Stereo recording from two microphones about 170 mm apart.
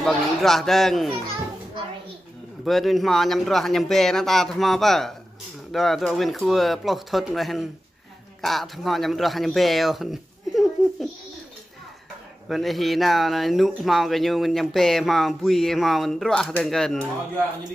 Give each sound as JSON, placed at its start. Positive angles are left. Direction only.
{"t": 0.0, "sound": "speech", "side_deg": 0}
{"t": 2.6, "sound": "a man's voice", "side_deg": 0}
{"t": 12.4, "sound": "speech", "side_deg": 0}